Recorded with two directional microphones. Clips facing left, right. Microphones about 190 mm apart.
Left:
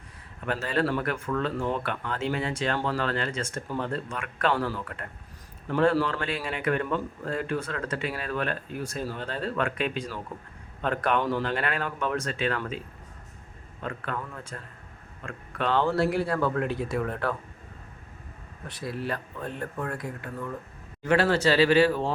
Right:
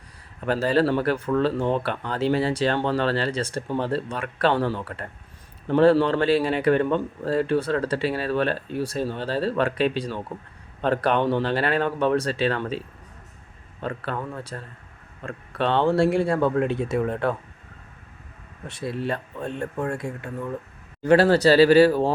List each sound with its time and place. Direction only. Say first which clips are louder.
0.4 s speech: right 6 dB; 35° right (ahead or behind)
13.8 s speech: right 4 dB; 30° right (ahead or behind)
18.7 s speech: right 4 dB; 25° right (ahead or behind)